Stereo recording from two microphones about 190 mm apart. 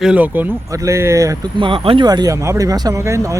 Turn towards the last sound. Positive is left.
turn(degrees=-15)  # may be behind; listen again after turning